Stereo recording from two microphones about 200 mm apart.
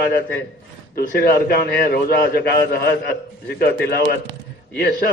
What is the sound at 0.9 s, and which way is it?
A man's voice, 50° left (ahead or behind).